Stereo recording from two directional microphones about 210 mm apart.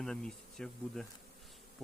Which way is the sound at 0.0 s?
5° left (ahead or behind).